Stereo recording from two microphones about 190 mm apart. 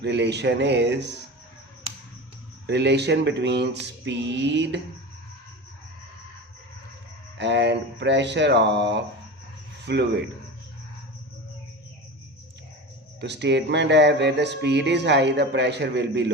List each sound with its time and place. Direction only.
0.0 s speech: 65° right (ahead or behind)
2.6 s speech: 65° right (ahead or behind)
7.3 s speech: 65° right (ahead or behind)
13.1 s speech: 65° right (ahead or behind)